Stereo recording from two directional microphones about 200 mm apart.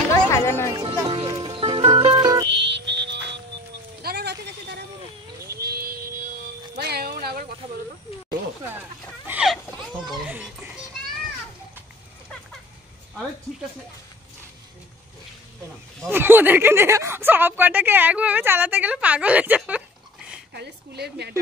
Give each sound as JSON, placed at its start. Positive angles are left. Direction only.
{"t": 0.1, "sound": "music", "side_deg": 15}
{"t": 0.7, "sound": "music", "side_deg": -20}
{"t": 2.4, "sound": "music", "side_deg": -60}
{"t": 4.0, "sound": "a sound", "side_deg": -55}
{"t": 5.5, "sound": "a sound", "side_deg": -50}
{"t": 6.8, "sound": "music", "side_deg": -50}
{"t": 9.2, "sound": "a sound", "side_deg": -5}
{"t": 10.0, "sound": "children playing", "side_deg": 0}
{"t": 16.1, "sound": "speech", "side_deg": -10}
{"t": 20.5, "sound": "a woman's voice", "side_deg": -55}